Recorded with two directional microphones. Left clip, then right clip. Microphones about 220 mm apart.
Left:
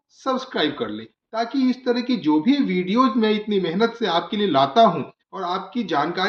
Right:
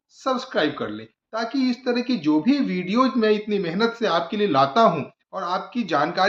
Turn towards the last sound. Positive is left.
turn(degrees=-15)  # may be behind; listen again after turning